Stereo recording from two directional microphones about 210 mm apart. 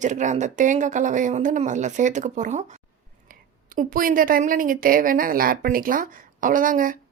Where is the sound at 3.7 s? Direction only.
40° right (ahead or behind).